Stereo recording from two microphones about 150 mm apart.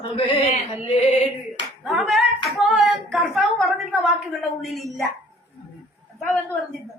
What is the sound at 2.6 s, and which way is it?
Hands, centre (ahead or behind).